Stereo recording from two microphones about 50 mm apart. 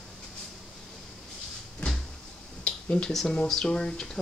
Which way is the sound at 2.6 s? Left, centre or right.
Left.